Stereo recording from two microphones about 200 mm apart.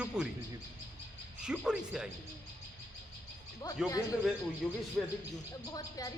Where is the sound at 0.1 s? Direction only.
5° right (ahead or behind).